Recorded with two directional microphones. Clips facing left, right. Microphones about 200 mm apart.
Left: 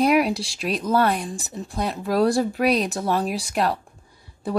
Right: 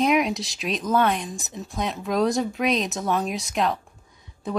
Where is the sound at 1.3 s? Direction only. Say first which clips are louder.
Left 3 dB; 35° left (ahead or behind).